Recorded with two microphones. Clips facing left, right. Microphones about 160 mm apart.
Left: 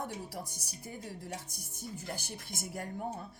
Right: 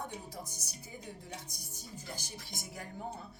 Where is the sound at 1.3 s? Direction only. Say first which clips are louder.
Left 3 dB; 60° left (ahead or behind).